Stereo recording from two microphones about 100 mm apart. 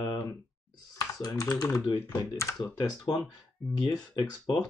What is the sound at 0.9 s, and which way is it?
Speech, 35° left (ahead or behind).